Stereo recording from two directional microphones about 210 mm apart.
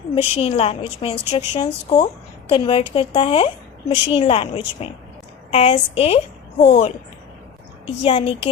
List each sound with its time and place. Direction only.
0.2 s a woman's voice: 25° left (ahead or behind)
8.0 s a woman's voice: 25° left (ahead or behind)